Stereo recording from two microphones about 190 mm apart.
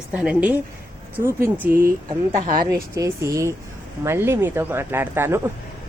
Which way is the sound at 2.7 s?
15° right (ahead or behind).